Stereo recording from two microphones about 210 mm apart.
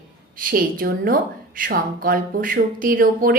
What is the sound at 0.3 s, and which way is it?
A woman's voice, 40° right (ahead or behind).